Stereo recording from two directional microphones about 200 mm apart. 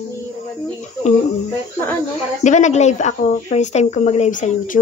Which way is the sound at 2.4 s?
35° left (ahead or behind).